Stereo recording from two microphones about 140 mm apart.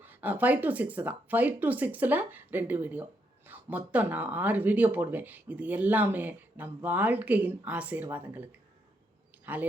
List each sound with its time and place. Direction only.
0.0 s speech: 10° right (ahead or behind)
9.5 s speech: 10° right (ahead or behind)